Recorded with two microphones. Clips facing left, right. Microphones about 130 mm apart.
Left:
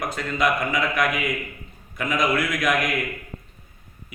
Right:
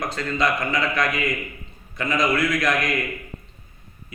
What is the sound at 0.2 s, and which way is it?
A man's voice, 5° left (ahead or behind).